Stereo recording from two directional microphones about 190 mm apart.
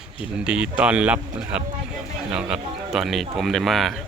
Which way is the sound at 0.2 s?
5° right (ahead or behind).